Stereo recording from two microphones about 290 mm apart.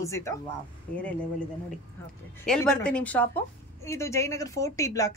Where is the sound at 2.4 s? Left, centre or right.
Centre.